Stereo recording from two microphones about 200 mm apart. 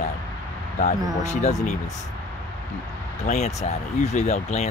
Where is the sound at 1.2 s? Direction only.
35° left (ahead or behind).